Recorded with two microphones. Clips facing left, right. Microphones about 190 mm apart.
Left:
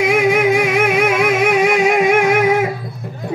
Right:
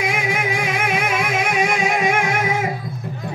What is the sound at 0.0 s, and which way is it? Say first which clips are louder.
Music: left 9 dB; 55° left (ahead or behind).